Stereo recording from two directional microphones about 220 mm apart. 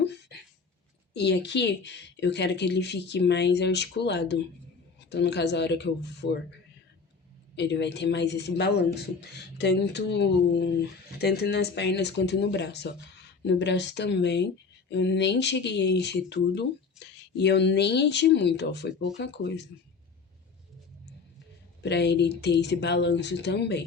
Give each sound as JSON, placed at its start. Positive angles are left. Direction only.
{"t": 0.0, "sound": "a sound", "side_deg": 50}
{"t": 1.1, "sound": "speech", "side_deg": 50}
{"t": 7.5, "sound": "speech", "side_deg": 50}
{"t": 21.8, "sound": "speech", "side_deg": 50}